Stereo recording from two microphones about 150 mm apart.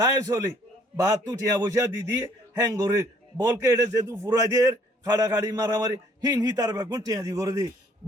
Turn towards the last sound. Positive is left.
turn(degrees=-20)  # may be behind; listen again after turning